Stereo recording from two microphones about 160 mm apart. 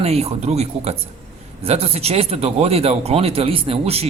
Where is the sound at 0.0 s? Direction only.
40° right (ahead or behind).